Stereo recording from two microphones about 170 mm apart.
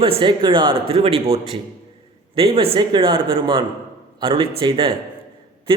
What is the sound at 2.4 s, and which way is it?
A man's voice, 35° right (ahead or behind).